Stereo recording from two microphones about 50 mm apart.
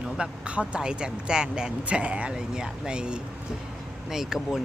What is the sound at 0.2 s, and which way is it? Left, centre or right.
Speech, right.